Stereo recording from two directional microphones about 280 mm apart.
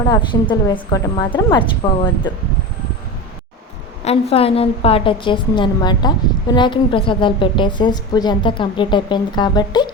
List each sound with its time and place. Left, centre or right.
0.1 s a woman's voice: centre
4.0 s a woman's voice: left